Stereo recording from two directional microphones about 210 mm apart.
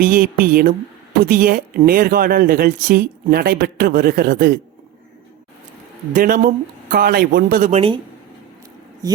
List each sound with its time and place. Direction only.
0.0 s speech: 45° right (ahead or behind)
6.1 s speech: 40° right (ahead or behind)
7.7 s a woman's voice: 25° right (ahead or behind)